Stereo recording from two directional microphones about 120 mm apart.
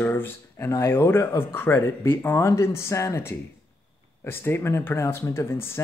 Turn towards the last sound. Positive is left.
turn(degrees=20)  # may be behind; listen again after turning